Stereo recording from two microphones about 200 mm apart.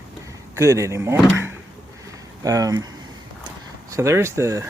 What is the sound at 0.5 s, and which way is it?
Speech, 15° right (ahead or behind).